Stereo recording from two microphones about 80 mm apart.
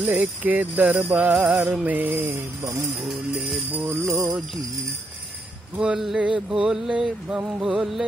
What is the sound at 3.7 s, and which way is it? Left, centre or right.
Jingle bell, right.